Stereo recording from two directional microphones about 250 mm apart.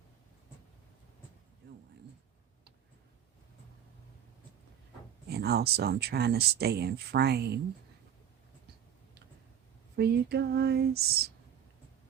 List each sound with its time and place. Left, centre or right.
1.6 s a sound: right
5.3 s speech: right
9.9 s speech: right